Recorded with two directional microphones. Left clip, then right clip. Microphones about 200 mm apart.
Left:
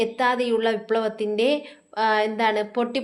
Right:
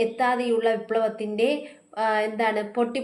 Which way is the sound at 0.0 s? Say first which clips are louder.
Left 1 dB; 30° left (ahead or behind).